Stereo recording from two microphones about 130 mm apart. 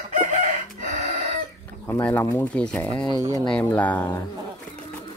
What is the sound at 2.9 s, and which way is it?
Speech, 35° left (ahead or behind).